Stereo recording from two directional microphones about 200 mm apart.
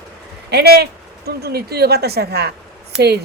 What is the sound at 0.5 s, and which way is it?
A woman's voice, 55° right (ahead or behind).